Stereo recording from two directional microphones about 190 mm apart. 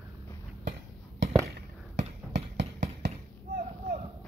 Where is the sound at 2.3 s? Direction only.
65° right (ahead or behind).